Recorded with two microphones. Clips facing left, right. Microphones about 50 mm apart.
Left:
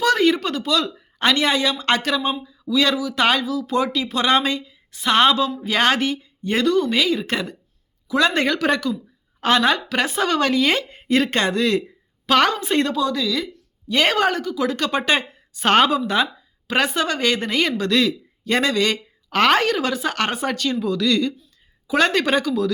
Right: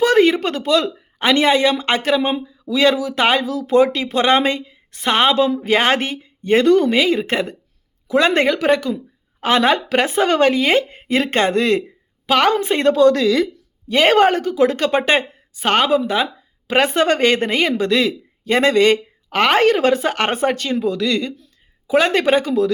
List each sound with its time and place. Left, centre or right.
0.0 s speech: right
3.7 s speech: right
5.1 s speech: right
12.2 s a woman's voice: centre
12.5 s speech: right
12.9 s speech: right
13.8 s a woman's voice: right
15.6 s speech: centre
15.9 s speech: centre
16.6 s speech: right
19.3 s a woman's voice: centre
19.5 s speech: right